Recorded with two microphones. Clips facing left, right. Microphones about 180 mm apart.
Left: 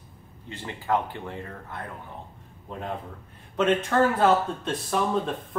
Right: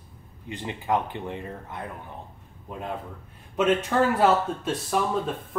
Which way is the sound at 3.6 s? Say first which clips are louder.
Even; 10° right (ahead or behind).